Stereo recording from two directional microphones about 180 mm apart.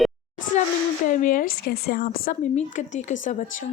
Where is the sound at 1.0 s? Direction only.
45° left (ahead or behind).